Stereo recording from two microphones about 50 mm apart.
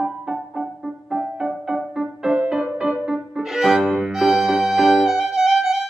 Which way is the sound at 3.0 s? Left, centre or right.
Centre.